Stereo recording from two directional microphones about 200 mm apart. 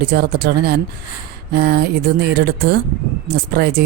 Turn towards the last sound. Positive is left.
turn(degrees=-55)  # may be behind; listen again after turning